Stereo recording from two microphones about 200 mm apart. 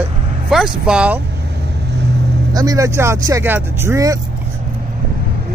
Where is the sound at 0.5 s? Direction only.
5° right (ahead or behind).